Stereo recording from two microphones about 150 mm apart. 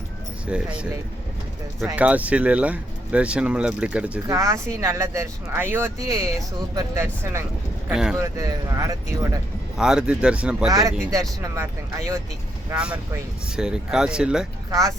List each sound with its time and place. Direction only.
0.5 s speech: 5° right (ahead or behind)
2.0 s speech: 10° right (ahead or behind)
4.3 s speech: 20° right (ahead or behind)
7.9 s speech: 5° right (ahead or behind)
8.2 s speech: 20° right (ahead or behind)
9.7 s speech: 5° right (ahead or behind)
10.7 s speech: 20° right (ahead or behind)
12.7 s speech: 5° right (ahead or behind)
14.7 s speech: 25° right (ahead or behind)